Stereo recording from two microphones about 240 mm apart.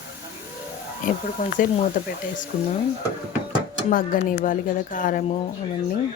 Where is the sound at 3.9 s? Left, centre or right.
Left.